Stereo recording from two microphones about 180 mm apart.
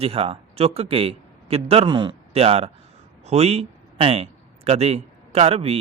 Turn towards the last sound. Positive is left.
turn(degrees=-35)  # may be behind; listen again after turning